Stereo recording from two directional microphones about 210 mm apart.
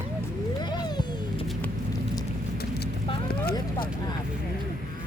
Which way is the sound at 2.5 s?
50° left (ahead or behind).